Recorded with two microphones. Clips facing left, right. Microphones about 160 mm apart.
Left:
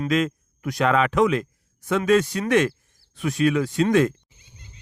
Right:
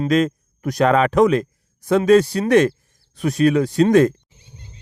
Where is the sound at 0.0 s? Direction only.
40° right (ahead or behind).